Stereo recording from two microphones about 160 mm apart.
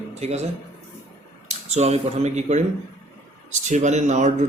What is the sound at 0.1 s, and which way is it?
Speech, 45° right (ahead or behind).